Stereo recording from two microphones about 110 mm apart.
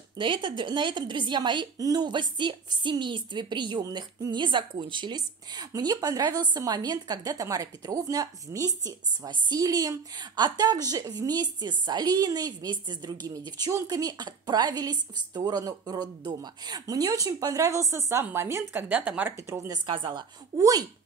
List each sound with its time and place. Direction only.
0.2 s a woman's voice: 50° right (ahead or behind); by 19.3 s 15° right (ahead or behind)
19.3 s a woman's voice: 25° right (ahead or behind)
19.9 s a woman's voice: 45° right (ahead or behind)